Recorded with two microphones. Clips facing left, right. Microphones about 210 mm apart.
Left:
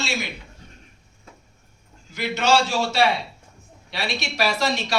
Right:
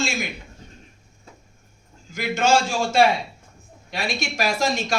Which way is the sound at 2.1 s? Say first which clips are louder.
Right 1 dB; 45° right (ahead or behind).